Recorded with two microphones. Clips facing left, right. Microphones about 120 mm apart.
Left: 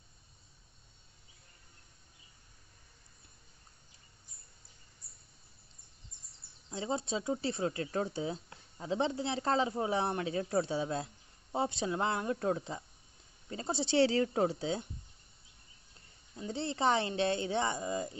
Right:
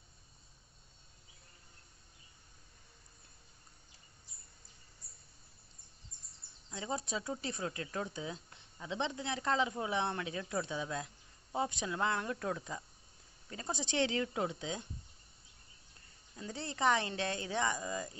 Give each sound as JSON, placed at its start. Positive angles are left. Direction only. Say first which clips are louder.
{"t": 6.7, "sound": "speech", "louder": "left 4 dB", "side_deg": 30}
{"t": 16.3, "sound": "speech", "louder": "left 4 dB", "side_deg": 25}